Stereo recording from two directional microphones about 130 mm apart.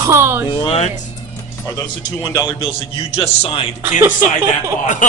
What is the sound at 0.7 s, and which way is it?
Speech, 60° left (ahead or behind).